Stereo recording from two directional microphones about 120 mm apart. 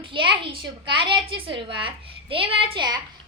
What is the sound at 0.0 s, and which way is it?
A woman's voice, 45° right (ahead or behind).